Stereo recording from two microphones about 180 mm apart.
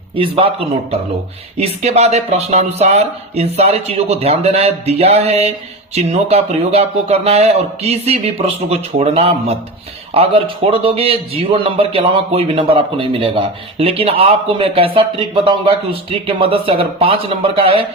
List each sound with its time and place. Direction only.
1.5 s a man's voice: 35° right (ahead or behind)